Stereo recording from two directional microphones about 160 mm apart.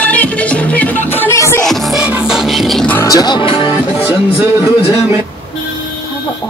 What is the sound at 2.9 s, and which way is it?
Music, 20° left (ahead or behind).